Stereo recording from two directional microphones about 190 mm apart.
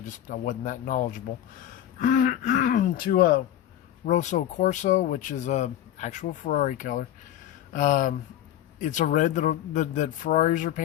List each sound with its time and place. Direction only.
0.1 s speech: 40° left (ahead or behind)